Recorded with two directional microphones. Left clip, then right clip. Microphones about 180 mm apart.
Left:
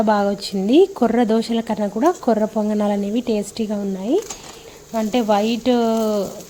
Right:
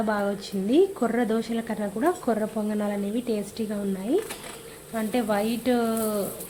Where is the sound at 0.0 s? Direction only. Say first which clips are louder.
Left 9 dB; 40° left (ahead or behind).